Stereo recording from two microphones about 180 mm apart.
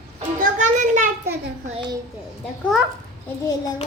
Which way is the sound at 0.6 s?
40° right (ahead or behind).